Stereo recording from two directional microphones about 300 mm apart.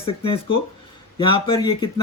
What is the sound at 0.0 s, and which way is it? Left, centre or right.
Speech, centre.